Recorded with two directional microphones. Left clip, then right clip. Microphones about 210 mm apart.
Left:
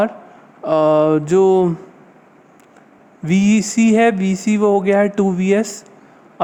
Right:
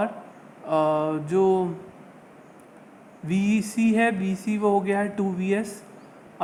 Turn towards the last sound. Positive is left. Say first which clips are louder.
# left 10 dB
turn(degrees=45)  # may be behind; listen again after turning